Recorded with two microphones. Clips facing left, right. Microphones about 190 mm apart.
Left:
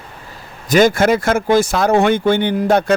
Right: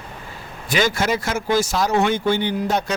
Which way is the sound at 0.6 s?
50° left (ahead or behind).